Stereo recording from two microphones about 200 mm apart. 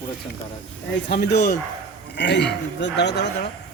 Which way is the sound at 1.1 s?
55° left (ahead or behind).